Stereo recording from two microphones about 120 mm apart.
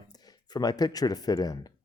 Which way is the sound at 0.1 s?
35° left (ahead or behind).